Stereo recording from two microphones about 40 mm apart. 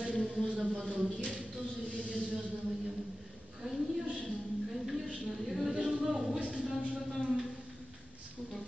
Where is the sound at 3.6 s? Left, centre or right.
Centre.